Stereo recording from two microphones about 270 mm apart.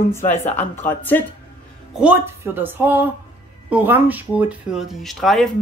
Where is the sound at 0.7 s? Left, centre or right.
Centre.